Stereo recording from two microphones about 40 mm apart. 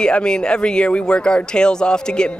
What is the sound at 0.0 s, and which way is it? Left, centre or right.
Speech, left.